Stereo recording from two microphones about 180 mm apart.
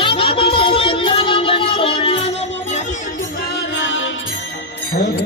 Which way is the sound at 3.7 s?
90° left.